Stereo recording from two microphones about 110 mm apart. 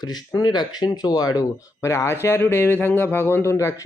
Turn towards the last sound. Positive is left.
turn(degrees=25)  # may be behind; listen again after turning